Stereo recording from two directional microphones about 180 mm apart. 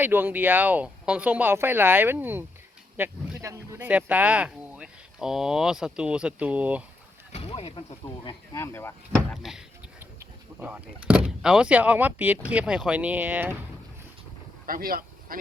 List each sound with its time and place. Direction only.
0.0 s speech: 10° right (ahead or behind)
7.3 s speech: 35° left (ahead or behind); by 9.0 s 15° left (ahead or behind)
9.3 s speech: centre (ahead or behind)
14.7 s speech: 55° right (ahead or behind)